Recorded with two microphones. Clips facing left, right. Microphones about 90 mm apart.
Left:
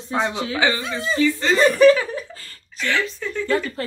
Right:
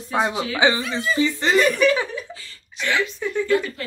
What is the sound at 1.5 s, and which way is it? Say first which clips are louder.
Speech: left 5 dB; 35° left (ahead or behind).